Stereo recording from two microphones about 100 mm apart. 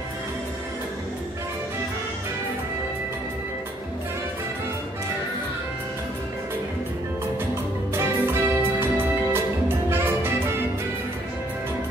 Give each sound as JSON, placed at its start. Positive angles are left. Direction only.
{"t": 7.9, "sound": "music", "side_deg": -25}